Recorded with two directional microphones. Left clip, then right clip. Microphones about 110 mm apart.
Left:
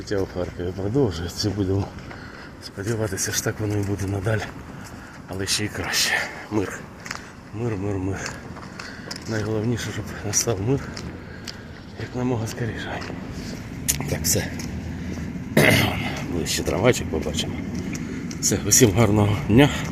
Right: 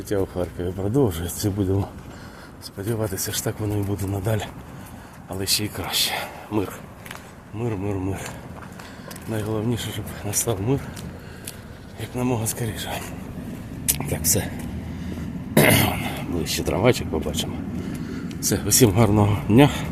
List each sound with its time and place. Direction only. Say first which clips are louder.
0.1 s speech: right 1 dB; 35° right (ahead or behind)
2.8 s speech: left 1 dB; 15° right (ahead or behind)
5.7 s speech: left 2 dB; 10° right (ahead or behind)
9.3 s speech: left 1 dB; 5° right (ahead or behind)
9.6 s speech: even; 15° right (ahead or behind)
12.1 s speech: right 1 dB; 30° right (ahead or behind)
13.8 s a sound: even; 25° right (ahead or behind)
15.5 s speech: even; 30° right (ahead or behind)